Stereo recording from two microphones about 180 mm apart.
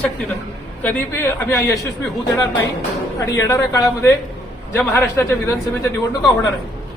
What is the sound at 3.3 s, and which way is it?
A man's voice, 15° left (ahead or behind).